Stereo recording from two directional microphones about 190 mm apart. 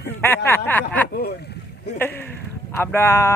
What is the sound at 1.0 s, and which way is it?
Speech, 55° left (ahead or behind).